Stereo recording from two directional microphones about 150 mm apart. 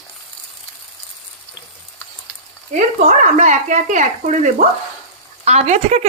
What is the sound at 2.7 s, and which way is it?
Speech, 50° right (ahead or behind).